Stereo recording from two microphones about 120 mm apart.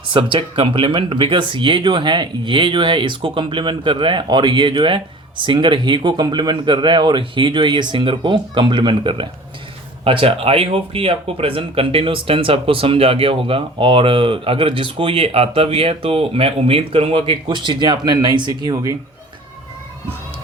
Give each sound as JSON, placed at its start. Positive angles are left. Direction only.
{"t": 0.1, "sound": "speech", "side_deg": -45}